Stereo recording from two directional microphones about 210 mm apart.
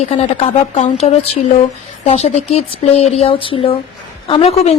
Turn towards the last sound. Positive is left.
turn(degrees=30)  # may be behind; listen again after turning